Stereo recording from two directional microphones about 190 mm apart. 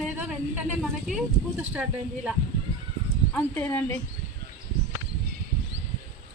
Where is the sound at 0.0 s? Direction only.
5° right (ahead or behind).